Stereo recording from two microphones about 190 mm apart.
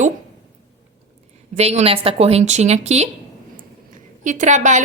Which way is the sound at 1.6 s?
35° right (ahead or behind).